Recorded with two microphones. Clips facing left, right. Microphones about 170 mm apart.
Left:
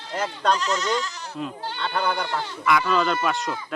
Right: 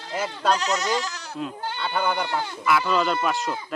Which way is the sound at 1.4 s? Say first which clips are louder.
Even; 5° right (ahead or behind).